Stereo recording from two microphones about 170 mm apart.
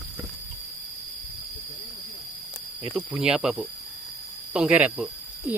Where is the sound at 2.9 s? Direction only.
5° right (ahead or behind).